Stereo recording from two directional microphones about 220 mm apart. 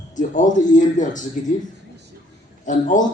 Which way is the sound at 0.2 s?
35° left (ahead or behind).